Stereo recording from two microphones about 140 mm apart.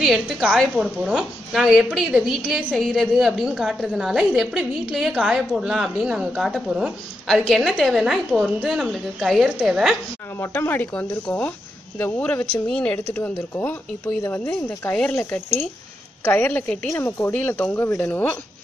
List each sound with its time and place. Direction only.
0.0 s a woman's voice: 5° right (ahead or behind)
10.3 s speech: 15° left (ahead or behind)
16.3 s speech: 15° left (ahead or behind)